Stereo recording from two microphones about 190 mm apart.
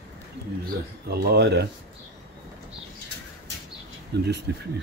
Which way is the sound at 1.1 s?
55° right (ahead or behind).